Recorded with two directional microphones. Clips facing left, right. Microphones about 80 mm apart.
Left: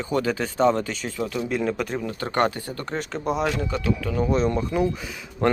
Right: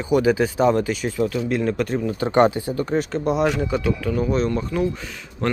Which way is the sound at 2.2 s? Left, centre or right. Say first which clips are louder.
Right 7 dB; centre.